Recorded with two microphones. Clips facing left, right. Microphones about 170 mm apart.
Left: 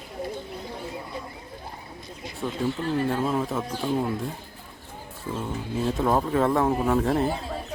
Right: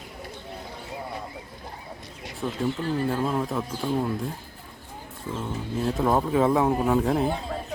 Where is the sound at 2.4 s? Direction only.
Centre (ahead or behind).